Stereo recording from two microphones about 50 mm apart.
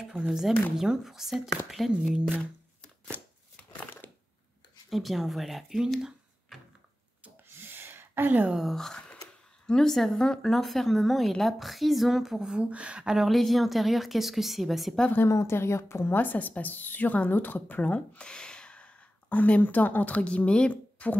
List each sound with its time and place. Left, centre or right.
0.0 s a woman's voice: centre
4.0 s a sound: left
4.8 s a woman's voice: centre
7.4 s a sound: right
8.7 s a woman's voice: centre
12.4 s speech: centre
13.3 s a woman's voice: centre
15.2 s a woman's voice: left
15.5 s a woman's voice: left